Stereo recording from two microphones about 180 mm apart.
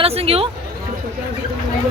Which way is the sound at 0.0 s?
35° right (ahead or behind).